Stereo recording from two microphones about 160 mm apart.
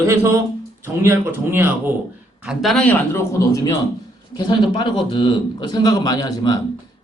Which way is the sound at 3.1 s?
20° left (ahead or behind).